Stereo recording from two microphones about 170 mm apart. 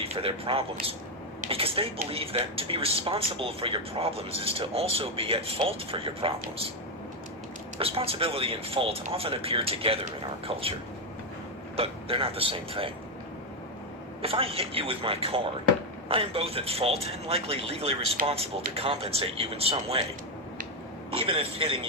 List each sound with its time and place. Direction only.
0.0 s speech: 35° right (ahead or behind)
7.8 s speech: 35° right (ahead or behind)
11.8 s speech: 35° right (ahead or behind)
14.2 s speech: 35° right (ahead or behind)
21.1 s speech: 30° right (ahead or behind)